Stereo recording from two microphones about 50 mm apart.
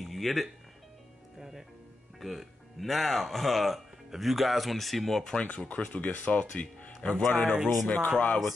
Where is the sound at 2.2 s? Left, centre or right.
Centre.